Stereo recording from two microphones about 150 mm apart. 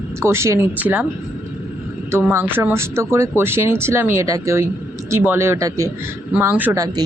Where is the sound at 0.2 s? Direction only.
20° right (ahead or behind).